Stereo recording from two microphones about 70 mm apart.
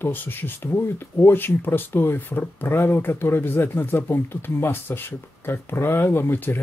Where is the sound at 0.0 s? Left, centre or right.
Left.